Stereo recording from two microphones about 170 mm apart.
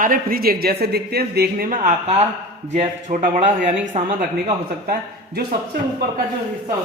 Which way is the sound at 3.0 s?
45° right (ahead or behind).